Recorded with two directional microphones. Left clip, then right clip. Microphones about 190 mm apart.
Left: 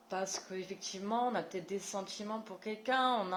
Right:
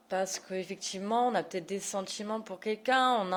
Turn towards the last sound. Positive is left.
turn(degrees=-45)  # may be behind; listen again after turning